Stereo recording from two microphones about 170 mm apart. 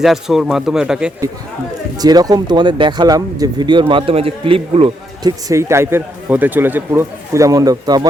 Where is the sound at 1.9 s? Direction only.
25° right (ahead or behind).